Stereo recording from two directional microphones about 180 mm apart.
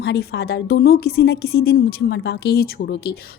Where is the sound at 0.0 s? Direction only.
65° left (ahead or behind).